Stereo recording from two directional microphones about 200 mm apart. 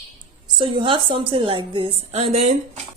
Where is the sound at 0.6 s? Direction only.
25° right (ahead or behind).